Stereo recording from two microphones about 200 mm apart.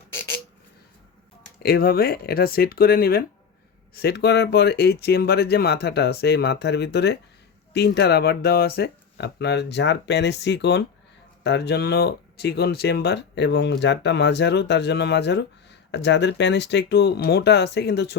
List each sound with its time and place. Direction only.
1.6 s speech: 50° left (ahead or behind)